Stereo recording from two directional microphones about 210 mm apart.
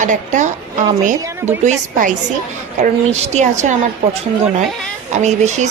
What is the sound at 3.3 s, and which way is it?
Speech, 35° right (ahead or behind).